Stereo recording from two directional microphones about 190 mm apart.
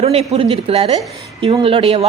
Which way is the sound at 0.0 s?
30° right (ahead or behind).